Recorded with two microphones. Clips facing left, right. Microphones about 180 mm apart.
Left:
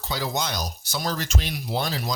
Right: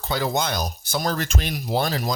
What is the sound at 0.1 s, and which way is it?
Speech, 55° right (ahead or behind).